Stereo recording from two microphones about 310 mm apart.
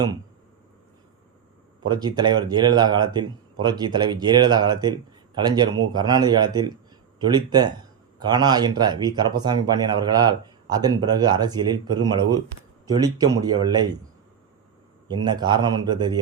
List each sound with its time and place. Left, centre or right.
1.8 s speech: centre
15.0 s speech: centre